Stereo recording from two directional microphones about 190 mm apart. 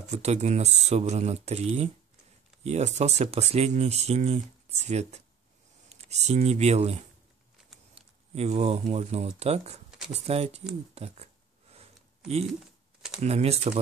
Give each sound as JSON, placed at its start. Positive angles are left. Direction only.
{"t": 0.1, "sound": "speech", "side_deg": -35}
{"t": 9.8, "sound": "a sound", "side_deg": 0}
{"t": 10.1, "sound": "speech", "side_deg": -35}
{"t": 13.2, "sound": "speech", "side_deg": -35}